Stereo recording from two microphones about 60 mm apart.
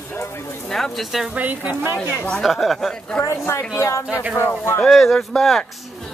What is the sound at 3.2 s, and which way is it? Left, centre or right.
Speech, left.